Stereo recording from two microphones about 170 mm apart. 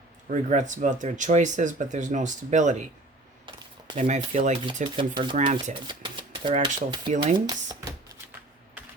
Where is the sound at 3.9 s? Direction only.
45° right (ahead or behind).